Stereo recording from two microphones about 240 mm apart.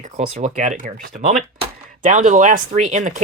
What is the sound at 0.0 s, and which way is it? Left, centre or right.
Speech, right.